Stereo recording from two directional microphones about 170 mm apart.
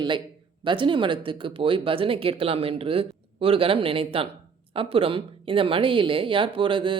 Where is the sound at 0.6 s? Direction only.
30° right (ahead or behind).